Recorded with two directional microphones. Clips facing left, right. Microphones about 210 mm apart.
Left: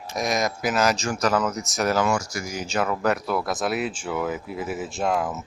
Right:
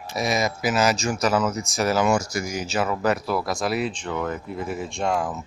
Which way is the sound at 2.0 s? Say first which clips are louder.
Right 3 dB; 20° right (ahead or behind).